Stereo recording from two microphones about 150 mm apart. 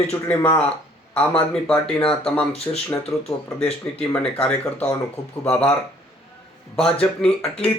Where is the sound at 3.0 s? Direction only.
5° left (ahead or behind).